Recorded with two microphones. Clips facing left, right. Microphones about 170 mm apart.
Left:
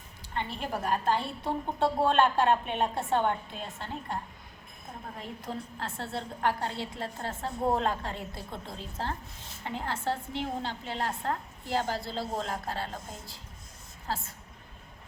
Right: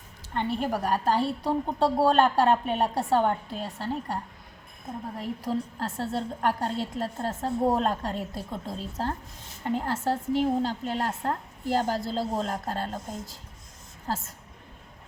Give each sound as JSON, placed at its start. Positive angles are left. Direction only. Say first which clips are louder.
{"t": 0.3, "sound": "a woman's voice", "louder": "right 6 dB", "side_deg": -40}
{"t": 5.4, "sound": "a woman's voice", "louder": "right 7 dB", "side_deg": -40}